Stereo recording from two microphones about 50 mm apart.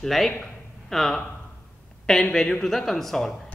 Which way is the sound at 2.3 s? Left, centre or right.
Centre.